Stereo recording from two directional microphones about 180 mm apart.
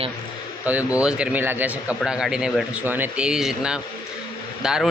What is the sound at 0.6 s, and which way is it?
A man's voice, 10° right (ahead or behind).